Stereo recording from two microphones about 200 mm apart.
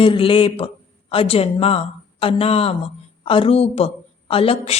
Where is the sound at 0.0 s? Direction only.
25° left (ahead or behind).